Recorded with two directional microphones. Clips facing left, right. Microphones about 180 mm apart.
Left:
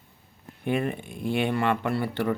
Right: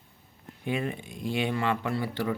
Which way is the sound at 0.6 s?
55° left (ahead or behind).